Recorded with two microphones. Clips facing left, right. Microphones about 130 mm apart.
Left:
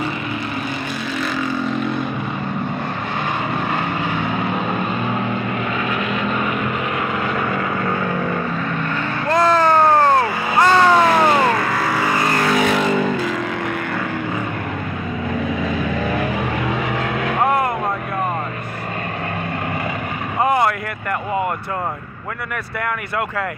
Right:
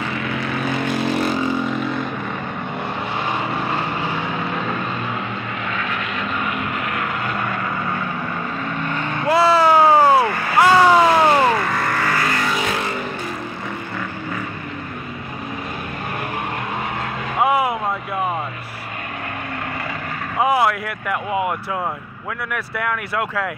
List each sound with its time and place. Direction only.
0.8 s vehicle: 90° right
9.3 s a sound: 5° right (ahead or behind)
10.6 s vehicle: 10° right (ahead or behind); by 12.2 s 10° left (ahead or behind)
12.3 s vehicle: 45° left (ahead or behind)
12.5 s vehicle: 90° left
16.9 s vehicle: 90° left
17.4 s vehicle: 5° right (ahead or behind)
20.3 s vehicle: centre (ahead or behind)